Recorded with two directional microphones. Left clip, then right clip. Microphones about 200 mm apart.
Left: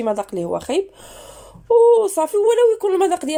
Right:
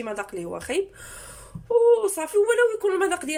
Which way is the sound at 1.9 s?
25° left (ahead or behind).